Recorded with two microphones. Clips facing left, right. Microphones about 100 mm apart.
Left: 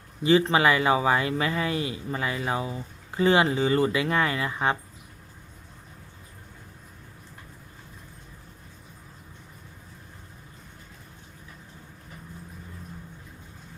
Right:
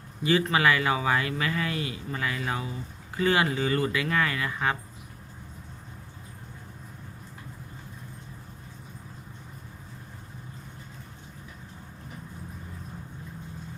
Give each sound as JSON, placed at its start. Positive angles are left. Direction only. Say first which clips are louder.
{"t": 0.2, "sound": "speech", "louder": "left 4 dB", "side_deg": 25}